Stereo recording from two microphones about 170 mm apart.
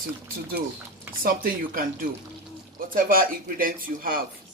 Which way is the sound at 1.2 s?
55° right (ahead or behind).